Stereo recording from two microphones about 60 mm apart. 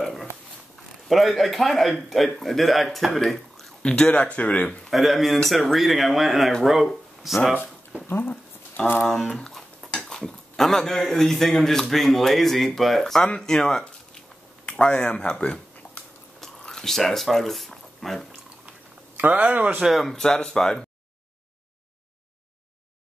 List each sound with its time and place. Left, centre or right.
0.0 s a sound: centre
1.0 s speech: centre
3.8 s speech: centre
4.8 s speech: centre
8.1 s a sound: left
9.3 s a sound: centre
9.9 s speech: centre
16.3 s biting: centre
19.1 s speech: right
19.8 s speech: centre